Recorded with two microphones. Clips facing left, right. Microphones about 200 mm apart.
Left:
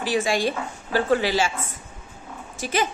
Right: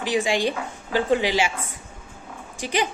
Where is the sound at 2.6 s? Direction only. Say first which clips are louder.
Even; 15° right (ahead or behind).